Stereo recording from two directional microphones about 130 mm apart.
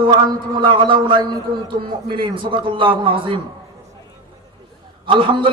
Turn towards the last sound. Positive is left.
turn(degrees=-40)  # may be behind; listen again after turning